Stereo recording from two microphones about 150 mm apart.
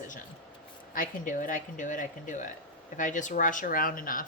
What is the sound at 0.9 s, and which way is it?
Speech, 65° left (ahead or behind).